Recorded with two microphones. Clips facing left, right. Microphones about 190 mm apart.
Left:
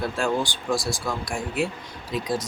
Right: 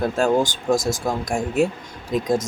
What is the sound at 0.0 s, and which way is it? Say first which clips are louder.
Speech: right 6 dB; 45° right (ahead or behind).